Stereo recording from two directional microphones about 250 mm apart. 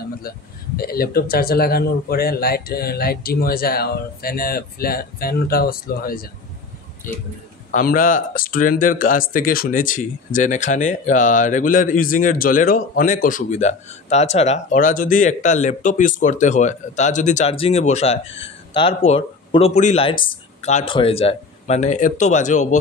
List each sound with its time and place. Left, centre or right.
0.7 s a man's voice: left